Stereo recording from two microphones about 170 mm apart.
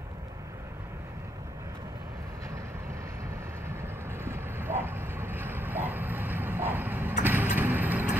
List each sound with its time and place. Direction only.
3.8 s vehicle: 15° right (ahead or behind)